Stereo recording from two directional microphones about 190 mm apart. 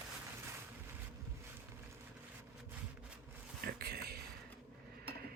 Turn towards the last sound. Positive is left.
turn(degrees=-55)  # may be behind; listen again after turning